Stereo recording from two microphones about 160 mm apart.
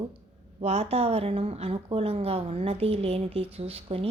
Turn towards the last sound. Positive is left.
turn(degrees=-35)  # may be behind; listen again after turning